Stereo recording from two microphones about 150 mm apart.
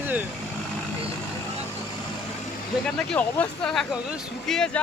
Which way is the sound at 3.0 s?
5° left (ahead or behind).